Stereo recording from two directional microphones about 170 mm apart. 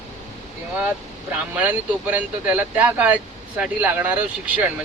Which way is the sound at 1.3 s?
10° right (ahead or behind).